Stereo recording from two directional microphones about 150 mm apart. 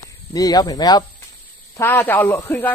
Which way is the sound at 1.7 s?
15° left (ahead or behind).